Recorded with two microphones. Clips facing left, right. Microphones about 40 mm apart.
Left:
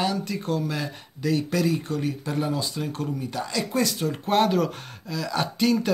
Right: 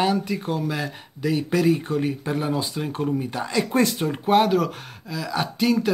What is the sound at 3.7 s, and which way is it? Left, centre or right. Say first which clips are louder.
Speech: right 3 dB; right.